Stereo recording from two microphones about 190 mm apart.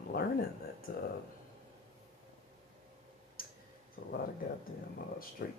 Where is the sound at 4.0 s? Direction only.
65° left (ahead or behind).